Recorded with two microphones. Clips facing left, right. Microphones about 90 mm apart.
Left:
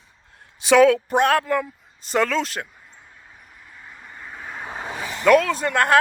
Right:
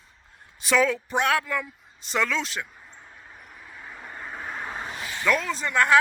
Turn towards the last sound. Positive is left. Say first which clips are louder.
# left 2 dB
turn(degrees=55)  # may be behind; listen again after turning